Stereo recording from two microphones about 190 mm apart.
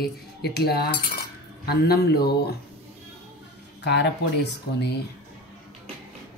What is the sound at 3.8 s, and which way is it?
Speech, 65° left (ahead or behind).